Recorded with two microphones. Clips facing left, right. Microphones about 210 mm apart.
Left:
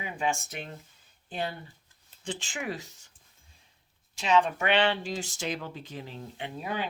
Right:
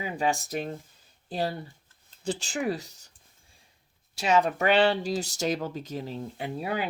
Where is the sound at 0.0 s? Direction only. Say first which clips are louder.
Right 3 dB; 35° right (ahead or behind).